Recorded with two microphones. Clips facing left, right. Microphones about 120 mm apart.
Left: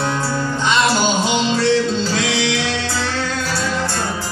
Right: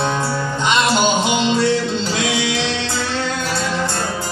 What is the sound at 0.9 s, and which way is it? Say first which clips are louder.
Music: right 1 dB; 15° right (ahead or behind).